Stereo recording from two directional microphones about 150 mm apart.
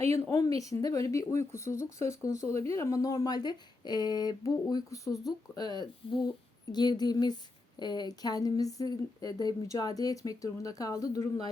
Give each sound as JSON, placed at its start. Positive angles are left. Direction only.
{"t": 0.3, "sound": "speech", "side_deg": 20}